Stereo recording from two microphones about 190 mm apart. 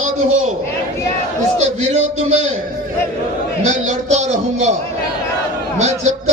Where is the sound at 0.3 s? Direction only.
40° right (ahead or behind).